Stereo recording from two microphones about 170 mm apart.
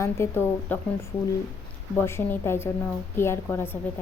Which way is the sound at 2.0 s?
15° left (ahead or behind).